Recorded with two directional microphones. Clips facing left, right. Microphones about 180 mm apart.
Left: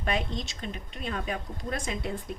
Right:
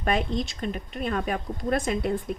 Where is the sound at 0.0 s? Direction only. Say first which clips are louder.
Right 5 dB; 55° right (ahead or behind).